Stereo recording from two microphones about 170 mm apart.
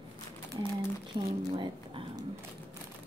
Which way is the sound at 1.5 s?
30° right (ahead or behind).